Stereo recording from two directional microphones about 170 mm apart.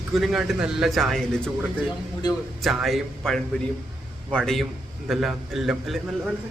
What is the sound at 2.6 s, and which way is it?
A man's voice, centre (ahead or behind).